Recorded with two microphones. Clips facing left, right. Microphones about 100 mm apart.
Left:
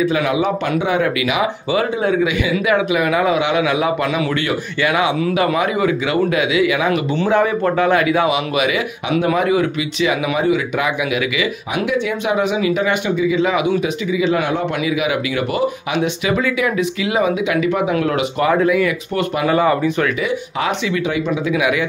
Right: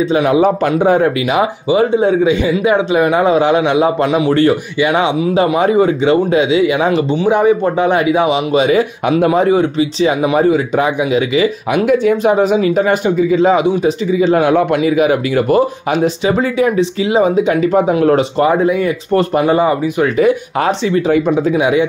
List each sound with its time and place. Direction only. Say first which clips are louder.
0.0 s speech: right 5 dB; 30° right (ahead or behind)
0.4 s speech: right 6 dB; 40° right (ahead or behind)
1.7 s speech: right 7 dB; 25° right (ahead or behind)
7.2 s speech: right 4 dB; 15° right (ahead or behind); by 11.4 s 35° right (ahead or behind)
11.7 s speech: right 8 dB; 45° right (ahead or behind)
14.8 s speech: right 7 dB; 40° right (ahead or behind)
18.5 s speech: right 2 dB; 25° right (ahead or behind)
19.5 s speech: right 2 dB; 20° right (ahead or behind)
20.2 s speech: right 8 dB; 40° right (ahead or behind)
21.5 s speech: right 5 dB; 30° right (ahead or behind)